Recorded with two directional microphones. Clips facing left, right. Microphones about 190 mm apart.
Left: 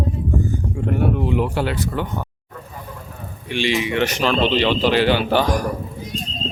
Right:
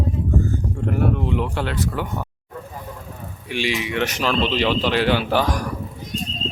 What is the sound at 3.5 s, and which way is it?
Speech, 5° right (ahead or behind).